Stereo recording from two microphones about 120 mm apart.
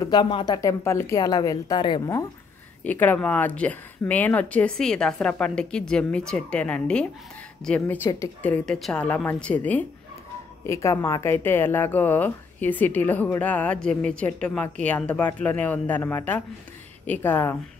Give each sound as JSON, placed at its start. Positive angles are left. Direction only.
{"t": 0.0, "sound": "speech", "side_deg": 40}
{"t": 0.5, "sound": "a woman's voice", "side_deg": 25}
{"t": 1.8, "sound": "a woman's voice", "side_deg": 40}
{"t": 2.8, "sound": "speech", "side_deg": 15}
{"t": 10.7, "sound": "speech", "side_deg": 25}